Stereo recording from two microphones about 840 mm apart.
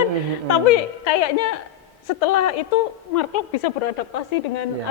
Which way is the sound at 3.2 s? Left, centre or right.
Left.